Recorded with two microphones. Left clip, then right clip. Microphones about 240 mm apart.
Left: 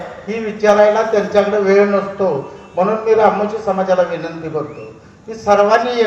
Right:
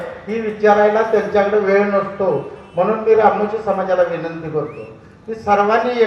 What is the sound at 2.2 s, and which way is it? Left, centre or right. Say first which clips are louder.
A man's voice: left 1 dB; left.